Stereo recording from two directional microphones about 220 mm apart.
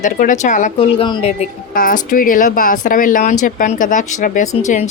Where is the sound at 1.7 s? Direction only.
40° left (ahead or behind).